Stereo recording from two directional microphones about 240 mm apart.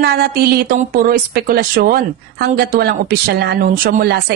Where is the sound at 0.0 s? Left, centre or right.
Right.